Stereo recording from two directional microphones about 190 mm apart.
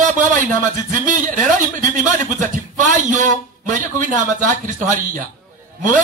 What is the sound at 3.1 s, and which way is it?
A man's voice, 40° right (ahead or behind).